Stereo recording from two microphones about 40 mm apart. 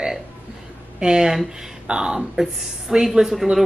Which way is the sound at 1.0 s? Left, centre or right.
Centre.